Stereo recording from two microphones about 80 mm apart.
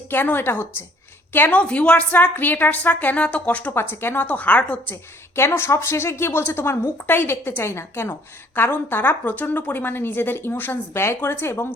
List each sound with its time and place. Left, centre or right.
0.1 s a woman's voice: left
5.4 s a woman's voice: left